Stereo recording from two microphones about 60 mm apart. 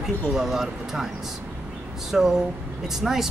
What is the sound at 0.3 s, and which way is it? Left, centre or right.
Speech, centre.